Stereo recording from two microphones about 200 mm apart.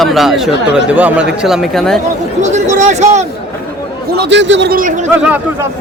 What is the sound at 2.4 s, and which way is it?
Speech, 35° right (ahead or behind).